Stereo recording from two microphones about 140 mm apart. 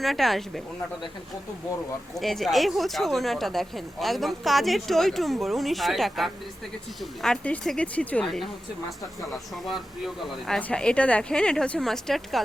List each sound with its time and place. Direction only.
0.0 s speech: centre (ahead or behind)
2.1 s speech: centre (ahead or behind)
9.6 s speech: centre (ahead or behind)